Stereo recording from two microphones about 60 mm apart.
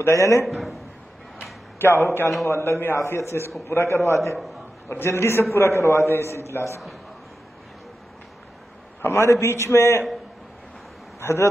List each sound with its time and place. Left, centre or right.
0.0 s a man's voice: left
0.5 s a sound: centre
1.8 s a man's voice: left
4.8 s a man's voice: left
9.0 s a man's voice: left
11.1 s speech: left